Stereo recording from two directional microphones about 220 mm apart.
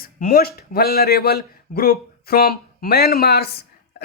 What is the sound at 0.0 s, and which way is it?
Speech, 40° left (ahead or behind).